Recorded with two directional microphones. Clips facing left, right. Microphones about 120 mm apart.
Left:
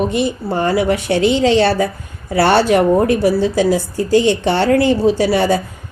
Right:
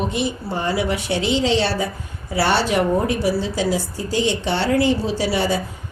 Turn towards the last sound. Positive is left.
turn(degrees=55)  # may be behind; listen again after turning